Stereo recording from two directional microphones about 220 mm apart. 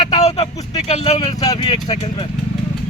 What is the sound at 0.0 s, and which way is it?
Vehicle, 30° left (ahead or behind).